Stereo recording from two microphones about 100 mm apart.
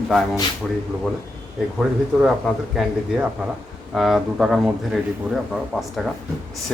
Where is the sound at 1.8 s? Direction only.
5° right (ahead or behind).